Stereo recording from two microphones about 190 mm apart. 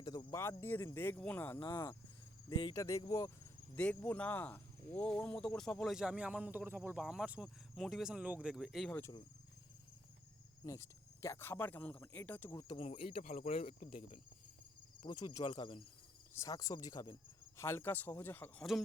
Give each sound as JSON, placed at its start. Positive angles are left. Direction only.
{"t": 0.0, "sound": "speech", "side_deg": 20}
{"t": 9.0, "sound": "speech", "side_deg": 15}
{"t": 10.6, "sound": "speech", "side_deg": 15}
{"t": 15.0, "sound": "speech", "side_deg": 20}
{"t": 15.4, "sound": "speech", "side_deg": 30}
{"t": 16.3, "sound": "speech", "side_deg": 15}